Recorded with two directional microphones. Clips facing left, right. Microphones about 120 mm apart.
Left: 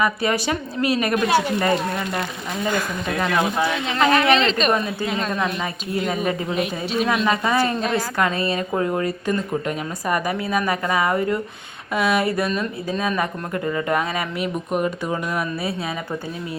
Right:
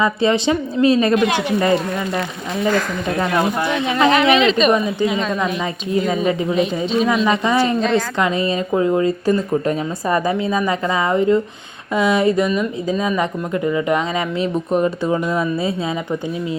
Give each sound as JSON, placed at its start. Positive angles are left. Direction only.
{"t": 0.0, "sound": "speech", "side_deg": -25}
{"t": 2.6, "sound": "speech", "side_deg": -35}
{"t": 3.8, "sound": "speech", "side_deg": -15}
{"t": 4.4, "sound": "speech", "side_deg": -5}
{"t": 6.5, "sound": "speech", "side_deg": 5}
{"t": 7.3, "sound": "speech", "side_deg": -20}
{"t": 7.8, "sound": "a woman's voice", "side_deg": 10}
{"t": 8.2, "sound": "speech", "side_deg": -20}
{"t": 14.4, "sound": "speech", "side_deg": -30}